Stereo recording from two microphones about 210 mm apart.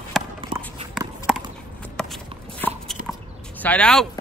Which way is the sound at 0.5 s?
25° right (ahead or behind).